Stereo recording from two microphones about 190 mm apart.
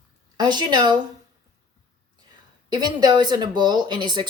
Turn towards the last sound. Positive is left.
turn(degrees=-25)  # may be behind; listen again after turning